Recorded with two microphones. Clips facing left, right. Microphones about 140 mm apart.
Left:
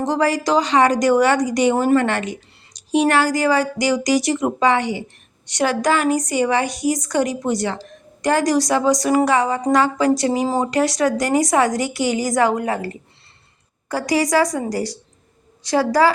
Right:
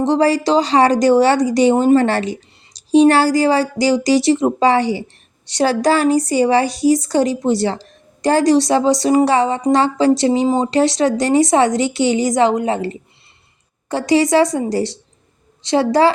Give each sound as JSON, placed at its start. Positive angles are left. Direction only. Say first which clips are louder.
{"t": 0.0, "sound": "a woman's voice", "louder": "right 4 dB", "side_deg": -30}